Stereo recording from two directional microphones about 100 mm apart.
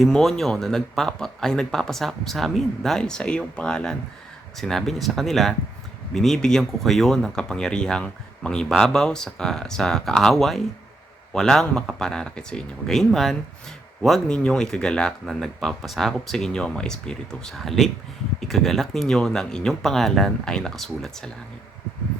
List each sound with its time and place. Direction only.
0.0 s speech: 5° left (ahead or behind)